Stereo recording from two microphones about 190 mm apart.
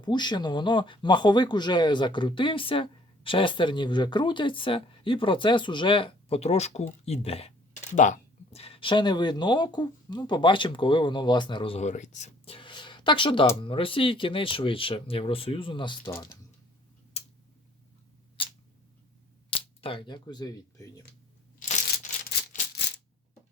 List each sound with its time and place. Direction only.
0.0 s speech: 25° left (ahead or behind)
19.5 s speech: 30° left (ahead or behind)